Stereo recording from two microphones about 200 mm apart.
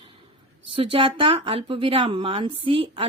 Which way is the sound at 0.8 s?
25° right (ahead or behind).